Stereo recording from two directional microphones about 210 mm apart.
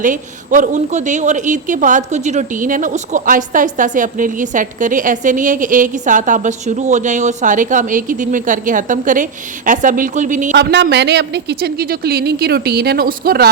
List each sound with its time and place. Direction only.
0.0 s a woman's voice: 40° right (ahead or behind)
10.5 s speech: 55° right (ahead or behind)